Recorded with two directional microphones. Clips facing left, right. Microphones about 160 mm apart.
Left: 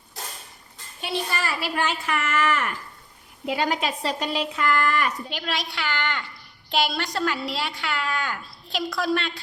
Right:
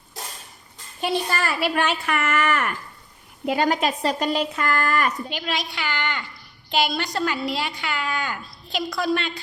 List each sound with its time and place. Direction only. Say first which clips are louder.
1.4 s a woman's voice: right 4 dB; 60° right (ahead or behind)
5.3 s a woman's voice: right 2 dB; centre (ahead or behind)